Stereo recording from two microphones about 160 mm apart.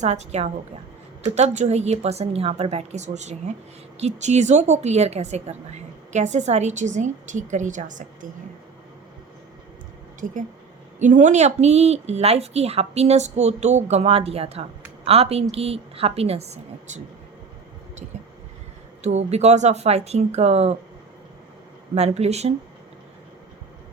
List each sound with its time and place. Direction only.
0.0 s a woman's voice: 45° right (ahead or behind)
10.2 s a woman's voice: 55° right (ahead or behind)
19.0 s a woman's voice: 45° right (ahead or behind)
21.9 s a woman's voice: 40° right (ahead or behind)